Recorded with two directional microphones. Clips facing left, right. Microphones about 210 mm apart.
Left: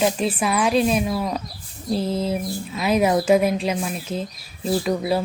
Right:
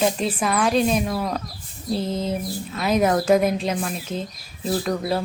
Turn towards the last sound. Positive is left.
turn(degrees=5)  # may be behind; listen again after turning